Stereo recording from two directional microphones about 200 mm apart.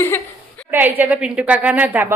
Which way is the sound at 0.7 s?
10° right (ahead or behind).